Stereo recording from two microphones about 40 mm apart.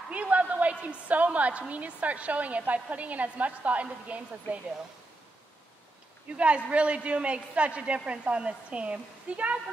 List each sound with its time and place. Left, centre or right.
0.1 s a woman's voice: right
6.2 s a woman's voice: right